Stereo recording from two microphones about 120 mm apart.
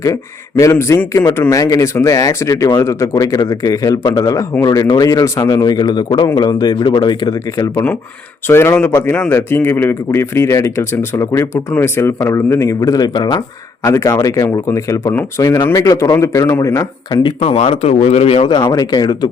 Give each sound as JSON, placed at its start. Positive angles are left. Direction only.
{"t": 0.6, "sound": "a man's voice", "side_deg": 25}
{"t": 17.4, "sound": "speech", "side_deg": 55}
{"t": 18.6, "sound": "a man's voice", "side_deg": 30}